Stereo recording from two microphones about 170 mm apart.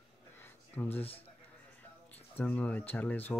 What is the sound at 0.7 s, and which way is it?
Speech, 10° left (ahead or behind).